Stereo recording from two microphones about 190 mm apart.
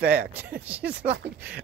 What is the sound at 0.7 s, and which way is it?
Speech, 5° right (ahead or behind).